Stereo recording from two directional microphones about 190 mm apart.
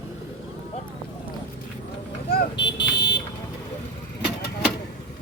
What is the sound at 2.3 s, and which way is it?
Buzzer, 65° left (ahead or behind).